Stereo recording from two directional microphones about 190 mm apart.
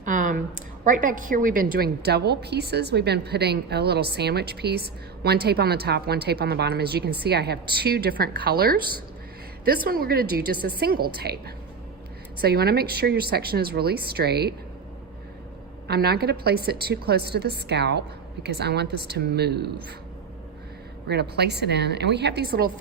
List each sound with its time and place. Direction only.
0.0 s a sound: 45° right (ahead or behind)
0.9 s a woman's voice: 45° right (ahead or behind)
15.9 s a woman's voice: 55° right (ahead or behind)
21.1 s a woman's voice: 60° right (ahead or behind)